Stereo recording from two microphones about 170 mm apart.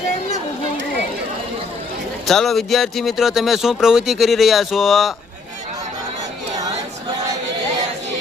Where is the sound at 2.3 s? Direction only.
Centre (ahead or behind).